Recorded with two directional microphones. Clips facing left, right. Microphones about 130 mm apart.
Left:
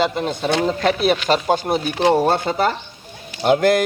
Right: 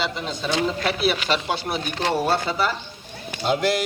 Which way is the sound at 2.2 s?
45° left (ahead or behind).